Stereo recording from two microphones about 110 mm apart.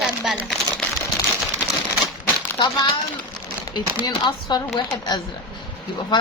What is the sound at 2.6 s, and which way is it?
Speech, 40° left (ahead or behind).